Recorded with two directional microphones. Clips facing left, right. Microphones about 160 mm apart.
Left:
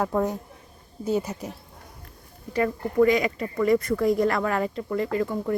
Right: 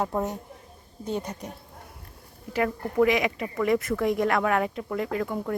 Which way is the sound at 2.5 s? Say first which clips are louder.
Left 2 dB; 5° right (ahead or behind).